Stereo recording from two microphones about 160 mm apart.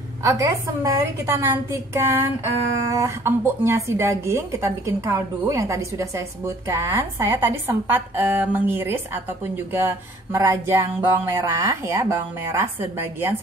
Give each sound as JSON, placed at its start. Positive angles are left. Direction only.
{"t": 0.2, "sound": "speech", "side_deg": -20}